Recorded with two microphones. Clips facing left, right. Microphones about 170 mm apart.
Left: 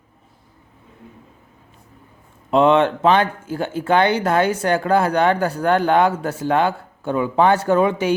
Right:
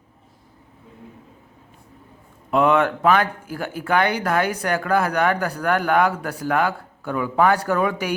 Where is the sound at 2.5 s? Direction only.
25° left (ahead or behind).